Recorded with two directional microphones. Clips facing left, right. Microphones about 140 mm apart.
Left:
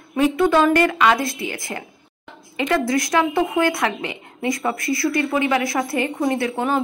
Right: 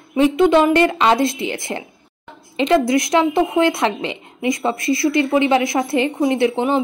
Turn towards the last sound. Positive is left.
turn(degrees=-25)  # may be behind; listen again after turning